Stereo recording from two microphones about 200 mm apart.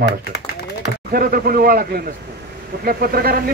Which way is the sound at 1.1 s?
50° right (ahead or behind).